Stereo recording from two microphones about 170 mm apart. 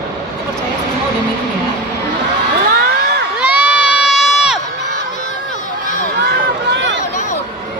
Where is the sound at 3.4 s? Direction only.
10° right (ahead or behind).